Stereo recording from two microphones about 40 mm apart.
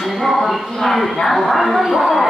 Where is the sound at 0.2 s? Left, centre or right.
Centre.